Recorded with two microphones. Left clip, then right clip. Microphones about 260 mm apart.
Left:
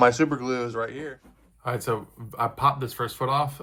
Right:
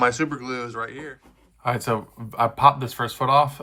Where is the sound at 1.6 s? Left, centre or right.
Right.